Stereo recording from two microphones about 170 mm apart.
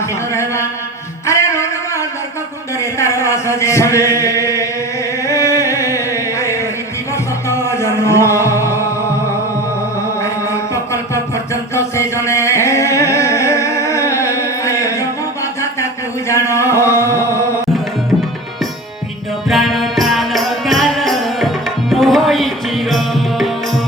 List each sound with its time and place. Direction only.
1.3 s a sound: 15° left (ahead or behind)
3.0 s music: 15° left (ahead or behind)
4.2 s chant: 20° left (ahead or behind)
5.2 s music: 20° left (ahead or behind)
10.2 s music: 15° left (ahead or behind)
16.3 s a sound: 15° left (ahead or behind)
19.5 s music: centre (ahead or behind)